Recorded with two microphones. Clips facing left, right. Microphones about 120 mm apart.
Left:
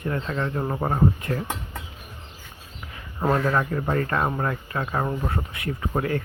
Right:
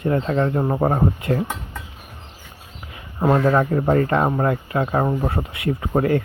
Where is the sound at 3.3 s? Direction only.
30° right (ahead or behind).